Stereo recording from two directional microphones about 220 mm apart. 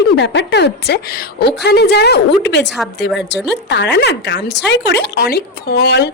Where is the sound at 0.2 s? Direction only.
50° left (ahead or behind).